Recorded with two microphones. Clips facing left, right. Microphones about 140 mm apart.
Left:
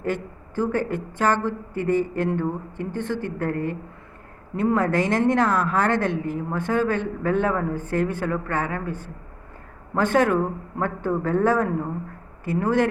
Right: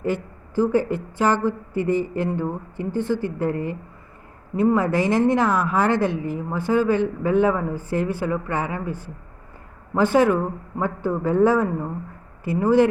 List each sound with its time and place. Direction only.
0.1 s speech: 10° right (ahead or behind)
3.5 s speech: 55° left (ahead or behind)
4.5 s speech: 5° right (ahead or behind)